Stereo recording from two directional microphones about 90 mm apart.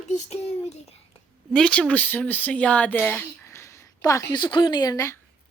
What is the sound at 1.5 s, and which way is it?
Speech, 10° left (ahead or behind).